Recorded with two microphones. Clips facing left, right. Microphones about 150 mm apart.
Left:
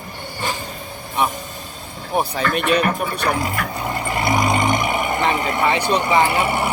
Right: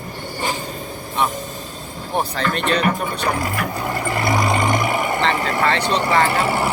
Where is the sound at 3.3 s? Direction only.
20° left (ahead or behind).